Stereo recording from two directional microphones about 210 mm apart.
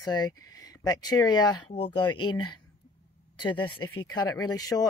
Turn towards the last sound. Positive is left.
turn(degrees=20)  # may be behind; listen again after turning